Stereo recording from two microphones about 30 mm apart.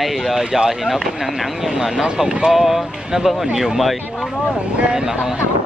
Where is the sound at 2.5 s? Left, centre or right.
Centre.